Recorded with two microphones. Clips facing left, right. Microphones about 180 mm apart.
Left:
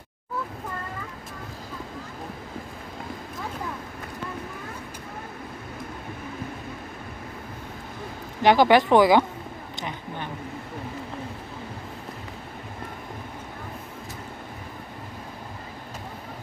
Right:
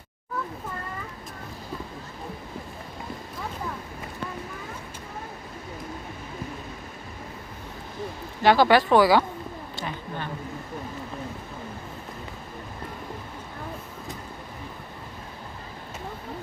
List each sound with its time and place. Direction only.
8.4 s speech: 15° left (ahead or behind)